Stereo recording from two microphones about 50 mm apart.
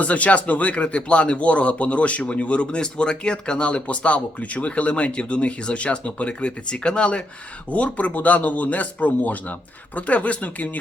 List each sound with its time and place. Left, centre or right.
0.0 s speech: left